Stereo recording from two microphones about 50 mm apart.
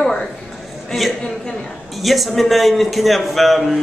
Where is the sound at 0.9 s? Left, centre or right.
Centre.